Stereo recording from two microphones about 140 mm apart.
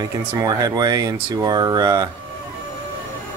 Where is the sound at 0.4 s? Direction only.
30° right (ahead or behind).